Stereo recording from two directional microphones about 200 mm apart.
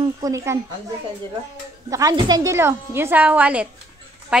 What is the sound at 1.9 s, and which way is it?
A woman's voice, 20° right (ahead or behind).